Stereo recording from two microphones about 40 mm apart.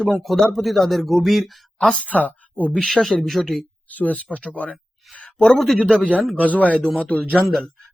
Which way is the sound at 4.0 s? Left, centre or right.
Left.